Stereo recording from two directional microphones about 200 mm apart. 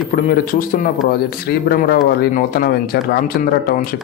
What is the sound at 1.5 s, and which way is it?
Speech, 50° left (ahead or behind).